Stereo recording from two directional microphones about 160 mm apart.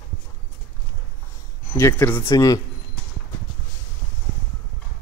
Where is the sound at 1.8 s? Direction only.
15° left (ahead or behind).